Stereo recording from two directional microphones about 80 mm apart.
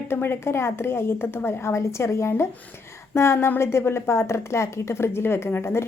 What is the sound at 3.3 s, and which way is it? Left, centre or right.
A woman's voice, left.